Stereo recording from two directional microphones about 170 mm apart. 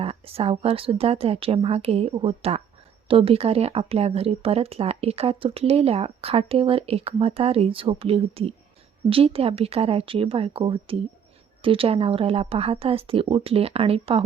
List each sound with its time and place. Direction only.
0.0 s speech: 35° right (ahead or behind)